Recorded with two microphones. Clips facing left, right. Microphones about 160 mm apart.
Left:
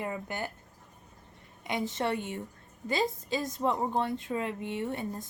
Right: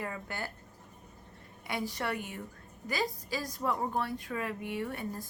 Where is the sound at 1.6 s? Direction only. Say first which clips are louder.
Left 4 dB; 20° left (ahead or behind).